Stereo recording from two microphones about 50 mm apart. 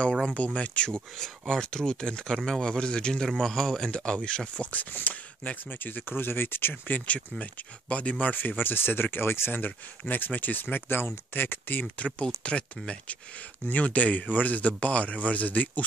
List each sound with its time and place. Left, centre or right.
0.4 s speech: left
1.5 s a man's voice: centre
3.9 s a man's voice: centre
4.6 s speech: left
7.9 s speech: left
9.6 s speech: left
11.8 s speech: left